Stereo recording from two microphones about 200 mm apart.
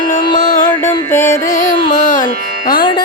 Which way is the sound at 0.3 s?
40° left (ahead or behind).